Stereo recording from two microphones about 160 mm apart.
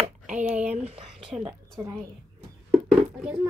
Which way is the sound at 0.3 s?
50° right (ahead or behind).